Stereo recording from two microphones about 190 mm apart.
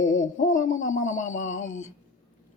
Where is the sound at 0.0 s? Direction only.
40° left (ahead or behind).